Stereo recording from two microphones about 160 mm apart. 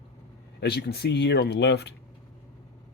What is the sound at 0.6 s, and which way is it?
Speech, 90° left.